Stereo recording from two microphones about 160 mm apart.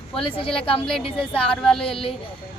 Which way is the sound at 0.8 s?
5° left (ahead or behind).